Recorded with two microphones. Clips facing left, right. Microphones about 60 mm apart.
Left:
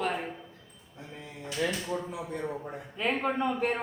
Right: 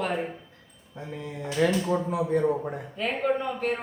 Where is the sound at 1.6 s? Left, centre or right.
Right.